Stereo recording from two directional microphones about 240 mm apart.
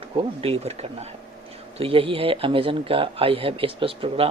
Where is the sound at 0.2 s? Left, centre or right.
Right.